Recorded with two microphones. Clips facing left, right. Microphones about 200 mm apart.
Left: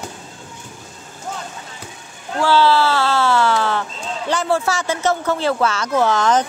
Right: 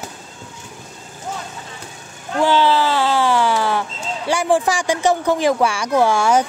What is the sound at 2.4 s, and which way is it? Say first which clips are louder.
Speech: left 1 dB; 15° right (ahead or behind).